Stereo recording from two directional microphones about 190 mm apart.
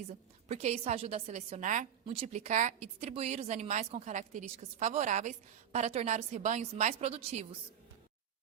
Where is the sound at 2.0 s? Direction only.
30° right (ahead or behind).